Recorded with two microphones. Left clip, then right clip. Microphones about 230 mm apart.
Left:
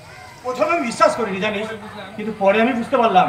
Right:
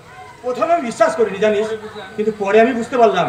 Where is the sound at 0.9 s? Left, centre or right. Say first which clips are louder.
Right 2 dB; right.